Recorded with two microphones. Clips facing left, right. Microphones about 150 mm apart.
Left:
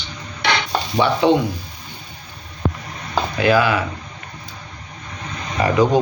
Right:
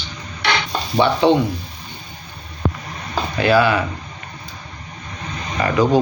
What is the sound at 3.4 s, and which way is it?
Speech, 10° left (ahead or behind).